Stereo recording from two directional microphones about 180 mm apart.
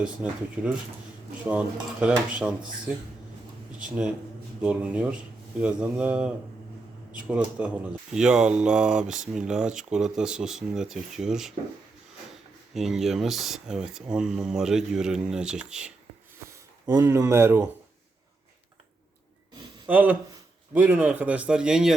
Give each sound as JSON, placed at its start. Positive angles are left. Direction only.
{"t": 0.0, "sound": "speech", "side_deg": -5}
{"t": 12.7, "sound": "speech", "side_deg": 0}
{"t": 16.5, "sound": "speech", "side_deg": -20}
{"t": 19.9, "sound": "speech", "side_deg": -10}